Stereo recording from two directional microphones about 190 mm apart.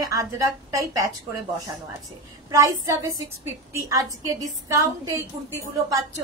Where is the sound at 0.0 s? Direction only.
15° right (ahead or behind).